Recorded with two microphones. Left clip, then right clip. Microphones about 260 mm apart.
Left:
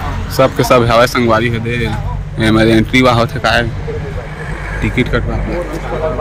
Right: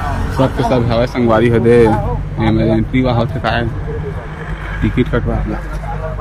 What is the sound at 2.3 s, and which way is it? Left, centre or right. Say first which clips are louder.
Speech: left 5 dB; centre.